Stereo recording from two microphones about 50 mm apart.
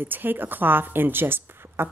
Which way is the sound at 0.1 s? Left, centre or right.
Right.